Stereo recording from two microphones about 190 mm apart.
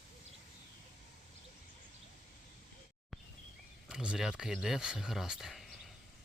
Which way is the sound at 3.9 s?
5° right (ahead or behind).